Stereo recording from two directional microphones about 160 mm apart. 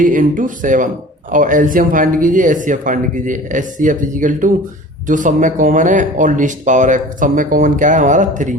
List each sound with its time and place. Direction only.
0.0 s speech: 55° right (ahead or behind)